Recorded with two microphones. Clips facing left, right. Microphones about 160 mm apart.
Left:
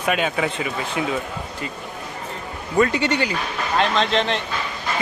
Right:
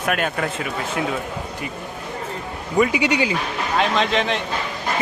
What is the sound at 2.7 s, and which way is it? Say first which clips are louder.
A man's voice: right 1 dB; 10° right (ahead or behind).